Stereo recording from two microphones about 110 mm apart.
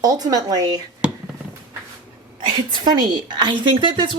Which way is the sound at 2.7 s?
40° right (ahead or behind).